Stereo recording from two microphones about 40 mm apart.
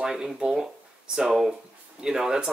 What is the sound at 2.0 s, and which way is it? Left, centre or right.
Speech, centre.